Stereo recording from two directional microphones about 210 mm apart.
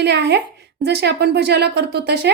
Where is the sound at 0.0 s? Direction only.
55° right (ahead or behind).